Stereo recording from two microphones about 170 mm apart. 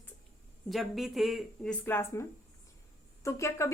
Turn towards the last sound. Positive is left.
turn(degrees=15)  # may be behind; listen again after turning